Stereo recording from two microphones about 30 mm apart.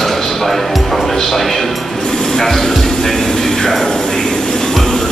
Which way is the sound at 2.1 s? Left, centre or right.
Centre.